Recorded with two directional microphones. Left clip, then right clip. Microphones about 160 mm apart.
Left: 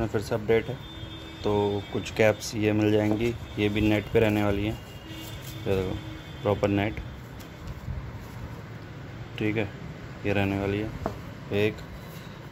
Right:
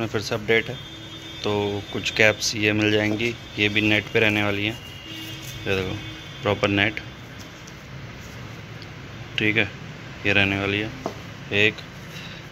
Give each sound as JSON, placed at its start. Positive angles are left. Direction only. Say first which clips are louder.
{"t": 0.0, "sound": "speech", "louder": "right 2 dB", "side_deg": 10}
{"t": 9.4, "sound": "speech", "louder": "right 8 dB", "side_deg": 10}